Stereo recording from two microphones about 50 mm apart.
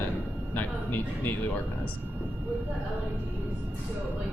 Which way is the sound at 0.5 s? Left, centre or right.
Left.